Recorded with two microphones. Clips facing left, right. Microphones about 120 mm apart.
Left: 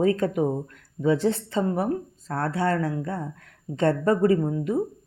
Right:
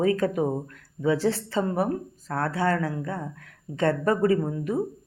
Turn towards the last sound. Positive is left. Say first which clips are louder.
# left 2 dB
turn(degrees=25)  # may be behind; listen again after turning